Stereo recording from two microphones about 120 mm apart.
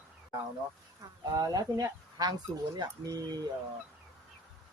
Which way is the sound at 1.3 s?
30° right (ahead or behind).